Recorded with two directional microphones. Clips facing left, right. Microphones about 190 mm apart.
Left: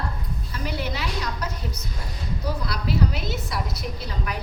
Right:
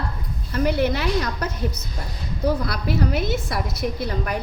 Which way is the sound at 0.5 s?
55° right (ahead or behind).